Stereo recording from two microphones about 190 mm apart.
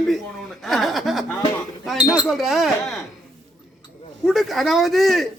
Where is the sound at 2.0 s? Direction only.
20° left (ahead or behind).